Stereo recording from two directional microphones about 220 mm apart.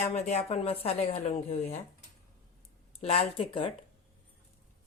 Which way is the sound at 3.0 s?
30° left (ahead or behind).